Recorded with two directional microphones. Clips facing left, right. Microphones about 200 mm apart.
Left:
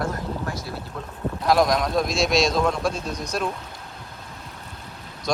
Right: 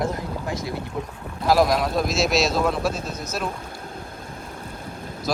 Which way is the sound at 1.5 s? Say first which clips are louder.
Right 1 dB; 5° right (ahead or behind).